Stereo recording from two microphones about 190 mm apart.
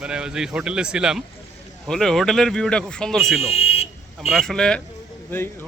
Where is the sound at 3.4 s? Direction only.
30° left (ahead or behind).